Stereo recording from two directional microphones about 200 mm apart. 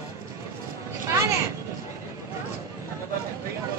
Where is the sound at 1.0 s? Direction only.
15° right (ahead or behind).